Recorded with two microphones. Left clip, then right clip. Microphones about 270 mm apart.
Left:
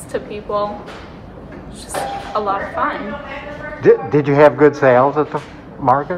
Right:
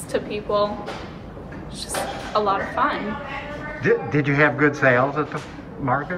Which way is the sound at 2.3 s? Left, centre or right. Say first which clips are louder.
Left 1 dB; centre.